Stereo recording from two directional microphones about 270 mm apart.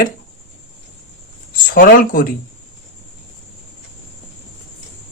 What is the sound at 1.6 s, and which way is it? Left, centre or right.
Speech, left.